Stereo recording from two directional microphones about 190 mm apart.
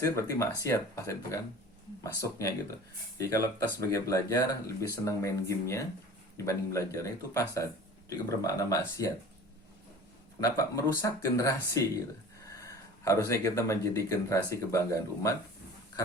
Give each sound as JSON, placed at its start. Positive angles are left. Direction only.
{"t": 0.0, "sound": "speech", "side_deg": 15}
{"t": 10.6, "sound": "speech", "side_deg": 15}